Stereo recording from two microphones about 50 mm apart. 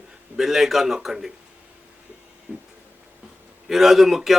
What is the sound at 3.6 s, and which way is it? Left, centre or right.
Speech, centre.